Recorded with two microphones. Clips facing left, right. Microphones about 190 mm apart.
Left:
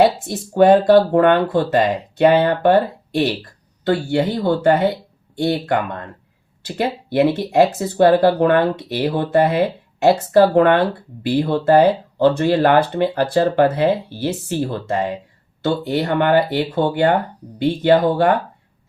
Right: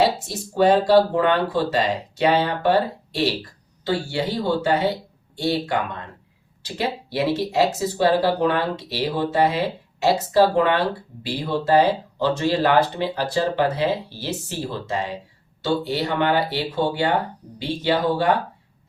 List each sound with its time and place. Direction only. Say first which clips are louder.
0.0 s speech: left 5 dB; 55° left (ahead or behind)